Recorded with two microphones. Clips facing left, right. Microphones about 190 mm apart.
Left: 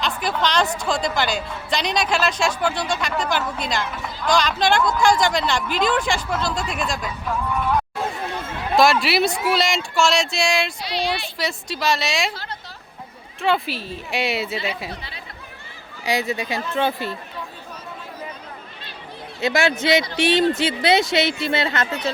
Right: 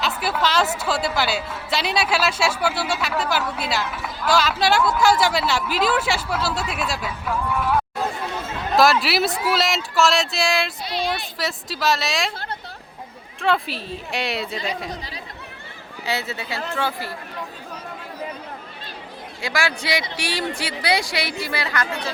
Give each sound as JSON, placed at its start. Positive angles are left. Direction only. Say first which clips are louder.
{"t": 0.0, "sound": "speech", "louder": "even", "side_deg": -5}
{"t": 8.7, "sound": "speech", "louder": "left 1 dB", "side_deg": 0}
{"t": 13.4, "sound": "speech", "louder": "left 1 dB", "side_deg": 0}
{"t": 16.0, "sound": "speech", "louder": "left 4 dB", "side_deg": 15}
{"t": 19.4, "sound": "a woman's voice", "louder": "left 5 dB", "side_deg": 20}